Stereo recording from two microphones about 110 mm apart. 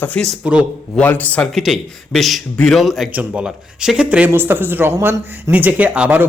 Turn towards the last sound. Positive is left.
turn(degrees=-15)  # may be behind; listen again after turning